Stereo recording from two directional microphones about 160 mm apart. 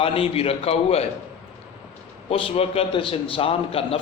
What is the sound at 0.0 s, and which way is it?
A man's voice, 35° left (ahead or behind).